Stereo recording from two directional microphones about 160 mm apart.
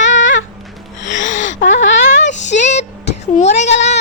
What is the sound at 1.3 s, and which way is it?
Speech, 50° left (ahead or behind).